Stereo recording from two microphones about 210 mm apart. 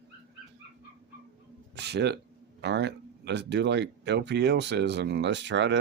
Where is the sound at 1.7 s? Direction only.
55° right (ahead or behind).